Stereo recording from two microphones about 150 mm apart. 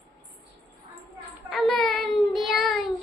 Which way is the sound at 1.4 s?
Centre (ahead or behind).